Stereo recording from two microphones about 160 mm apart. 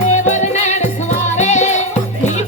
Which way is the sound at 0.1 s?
50° left (ahead or behind).